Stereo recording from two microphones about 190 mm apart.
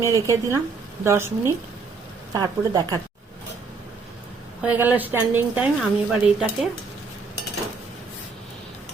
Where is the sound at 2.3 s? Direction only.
20° right (ahead or behind).